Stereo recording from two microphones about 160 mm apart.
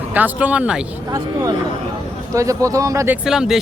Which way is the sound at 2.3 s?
20° right (ahead or behind).